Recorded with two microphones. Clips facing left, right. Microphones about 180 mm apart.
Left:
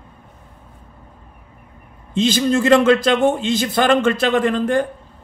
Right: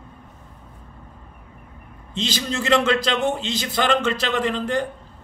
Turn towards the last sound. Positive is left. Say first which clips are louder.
# left 6 dB
turn(degrees=50)  # may be behind; listen again after turning